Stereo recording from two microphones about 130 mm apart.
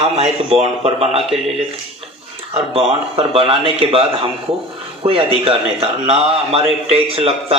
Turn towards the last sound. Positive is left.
turn(degrees=-45)  # may be behind; listen again after turning